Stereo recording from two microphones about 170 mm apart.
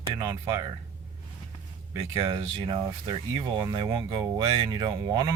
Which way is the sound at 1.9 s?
20° right (ahead or behind).